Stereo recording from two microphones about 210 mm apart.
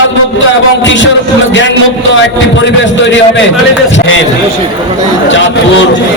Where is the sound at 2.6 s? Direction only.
60° left (ahead or behind).